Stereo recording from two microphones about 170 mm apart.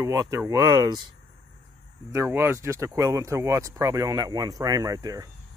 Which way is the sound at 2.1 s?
15° right (ahead or behind).